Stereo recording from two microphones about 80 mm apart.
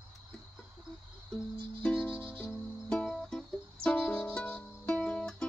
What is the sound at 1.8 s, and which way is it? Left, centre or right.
Music, left.